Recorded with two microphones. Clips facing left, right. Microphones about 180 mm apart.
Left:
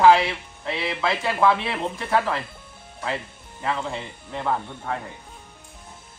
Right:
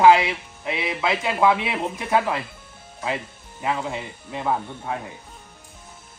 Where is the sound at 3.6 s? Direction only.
15° right (ahead or behind).